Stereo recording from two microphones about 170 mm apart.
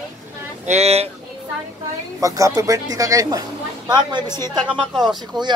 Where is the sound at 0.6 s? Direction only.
40° right (ahead or behind).